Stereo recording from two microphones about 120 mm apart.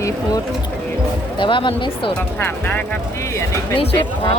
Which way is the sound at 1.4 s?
45° left (ahead or behind).